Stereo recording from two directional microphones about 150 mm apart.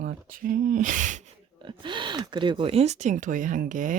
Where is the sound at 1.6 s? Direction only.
30° right (ahead or behind).